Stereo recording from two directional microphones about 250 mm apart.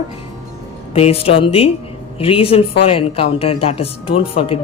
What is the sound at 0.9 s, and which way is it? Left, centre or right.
Speech, left.